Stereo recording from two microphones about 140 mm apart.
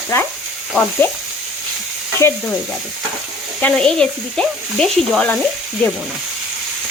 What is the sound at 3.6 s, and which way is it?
Frying, 5° left (ahead or behind).